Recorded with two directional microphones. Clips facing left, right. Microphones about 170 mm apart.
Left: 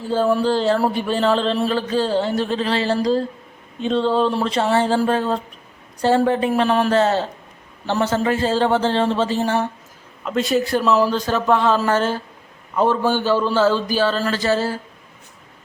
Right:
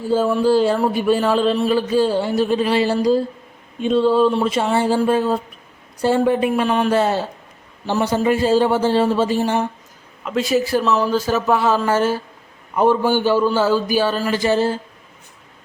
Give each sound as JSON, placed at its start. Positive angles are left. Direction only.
{"t": 0.1, "sound": "speech", "side_deg": -5}
{"t": 6.6, "sound": "speech", "side_deg": 0}
{"t": 6.9, "sound": "speech", "side_deg": -10}
{"t": 10.2, "sound": "speech", "side_deg": 0}